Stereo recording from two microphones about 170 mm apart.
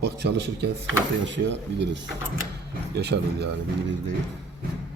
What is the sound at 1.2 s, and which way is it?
Speech, 90° right.